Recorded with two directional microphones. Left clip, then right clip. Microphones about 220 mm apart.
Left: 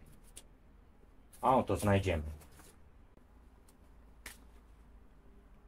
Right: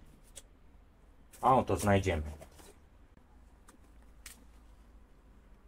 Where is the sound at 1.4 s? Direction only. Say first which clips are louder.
Right 2 dB; 25° right (ahead or behind).